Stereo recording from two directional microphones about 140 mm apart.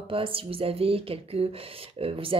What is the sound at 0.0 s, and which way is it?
Speech, 40° right (ahead or behind).